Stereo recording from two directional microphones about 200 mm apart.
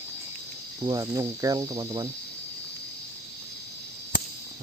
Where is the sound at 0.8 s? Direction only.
15° right (ahead or behind).